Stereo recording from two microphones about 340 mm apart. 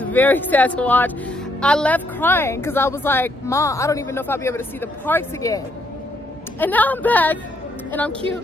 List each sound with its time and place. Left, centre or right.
0.0 s a woman's voice: centre
6.6 s speech: centre